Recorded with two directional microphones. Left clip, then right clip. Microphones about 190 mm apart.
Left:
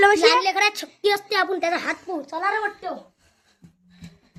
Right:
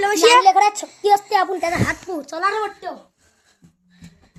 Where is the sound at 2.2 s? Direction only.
50° right (ahead or behind).